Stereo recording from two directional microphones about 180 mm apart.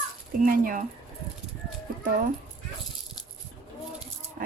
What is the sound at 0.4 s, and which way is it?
Speech, 50° right (ahead or behind).